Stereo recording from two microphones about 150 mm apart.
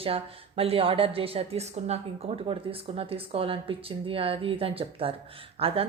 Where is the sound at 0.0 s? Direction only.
40° right (ahead or behind).